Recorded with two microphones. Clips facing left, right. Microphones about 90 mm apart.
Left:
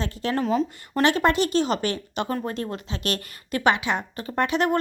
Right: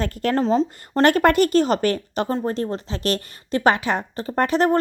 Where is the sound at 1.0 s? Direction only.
50° right (ahead or behind).